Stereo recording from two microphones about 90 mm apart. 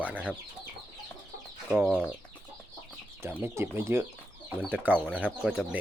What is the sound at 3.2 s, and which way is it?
Speech, 25° right (ahead or behind).